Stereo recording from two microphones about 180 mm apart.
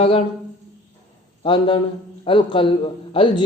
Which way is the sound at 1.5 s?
30° left (ahead or behind).